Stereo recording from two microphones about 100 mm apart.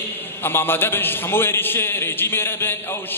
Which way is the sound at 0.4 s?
25° left (ahead or behind).